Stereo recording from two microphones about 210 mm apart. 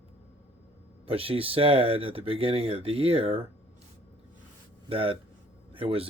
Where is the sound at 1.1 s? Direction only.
25° right (ahead or behind).